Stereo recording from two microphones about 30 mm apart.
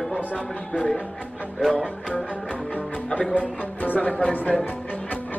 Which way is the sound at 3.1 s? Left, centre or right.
Left.